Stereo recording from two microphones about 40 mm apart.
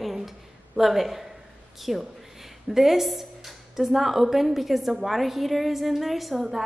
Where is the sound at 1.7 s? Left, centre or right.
Centre.